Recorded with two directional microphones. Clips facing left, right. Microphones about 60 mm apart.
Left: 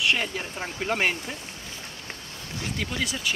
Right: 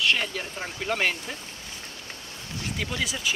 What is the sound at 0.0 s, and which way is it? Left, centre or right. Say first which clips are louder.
Speech: even; centre.